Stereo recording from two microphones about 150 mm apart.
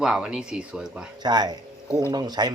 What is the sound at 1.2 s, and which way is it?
A man's voice, 30° right (ahead or behind).